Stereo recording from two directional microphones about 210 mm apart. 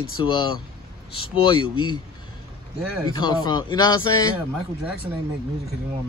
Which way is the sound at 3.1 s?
20° left (ahead or behind).